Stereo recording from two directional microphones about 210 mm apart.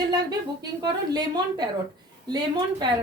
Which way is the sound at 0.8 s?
20° right (ahead or behind).